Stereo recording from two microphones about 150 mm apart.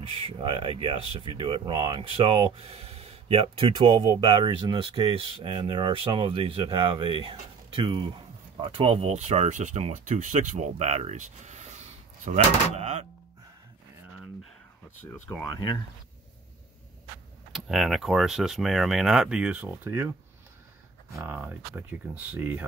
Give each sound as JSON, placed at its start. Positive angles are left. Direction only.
{"t": 0.2, "sound": "speech", "side_deg": -35}
{"t": 15.0, "sound": "speech", "side_deg": 15}
{"t": 17.5, "sound": "speech", "side_deg": 0}
{"t": 21.1, "sound": "speech", "side_deg": -15}